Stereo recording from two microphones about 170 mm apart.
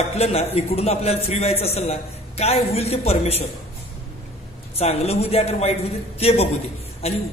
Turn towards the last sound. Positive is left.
turn(degrees=35)  # may be behind; listen again after turning